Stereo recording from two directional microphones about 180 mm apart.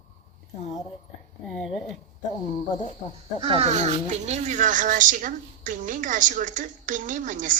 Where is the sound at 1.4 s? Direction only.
Centre (ahead or behind).